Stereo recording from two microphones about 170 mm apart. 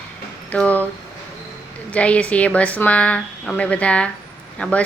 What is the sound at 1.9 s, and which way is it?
Speech, 10° left (ahead or behind).